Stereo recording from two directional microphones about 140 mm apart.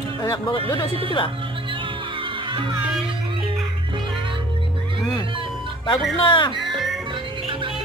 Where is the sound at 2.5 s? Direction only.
35° right (ahead or behind).